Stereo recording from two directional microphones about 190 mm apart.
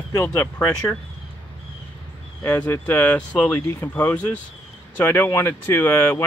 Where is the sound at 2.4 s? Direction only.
10° left (ahead or behind).